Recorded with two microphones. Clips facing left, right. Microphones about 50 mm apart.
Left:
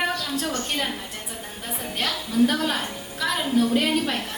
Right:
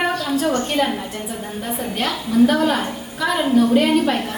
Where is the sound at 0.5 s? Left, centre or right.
Centre.